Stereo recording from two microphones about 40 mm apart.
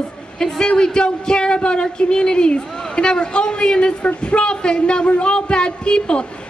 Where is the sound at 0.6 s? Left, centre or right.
Centre.